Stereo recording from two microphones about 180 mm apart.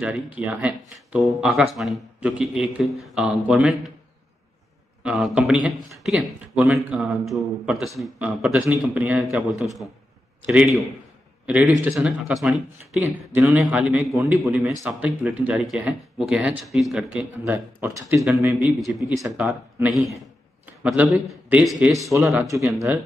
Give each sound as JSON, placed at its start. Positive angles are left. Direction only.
{"t": 0.0, "sound": "speech", "side_deg": -5}
{"t": 5.0, "sound": "speech", "side_deg": -5}
{"t": 18.8, "sound": "speech", "side_deg": 0}
{"t": 21.9, "sound": "speech", "side_deg": -15}